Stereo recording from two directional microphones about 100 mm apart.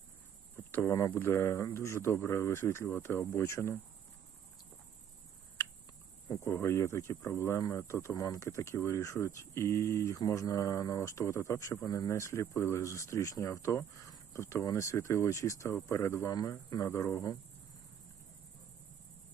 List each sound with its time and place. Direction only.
0.5 s speech: 20° left (ahead or behind)
6.2 s speech: 30° left (ahead or behind)